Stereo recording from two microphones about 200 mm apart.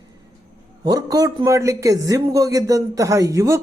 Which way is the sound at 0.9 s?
20° right (ahead or behind).